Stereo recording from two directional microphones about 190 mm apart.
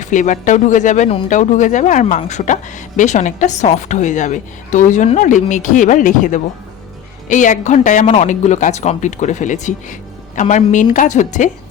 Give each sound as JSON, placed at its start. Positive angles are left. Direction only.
{"t": 0.0, "sound": "speech", "side_deg": 40}